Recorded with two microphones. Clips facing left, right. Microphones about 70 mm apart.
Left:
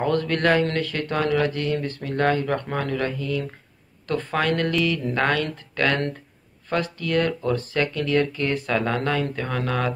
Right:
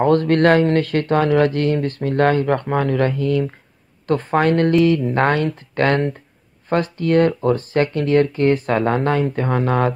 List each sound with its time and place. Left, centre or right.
0.0 s speech: right
4.1 s speech: right